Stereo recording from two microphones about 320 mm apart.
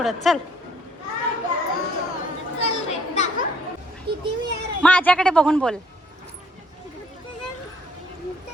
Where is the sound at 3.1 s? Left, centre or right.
Left.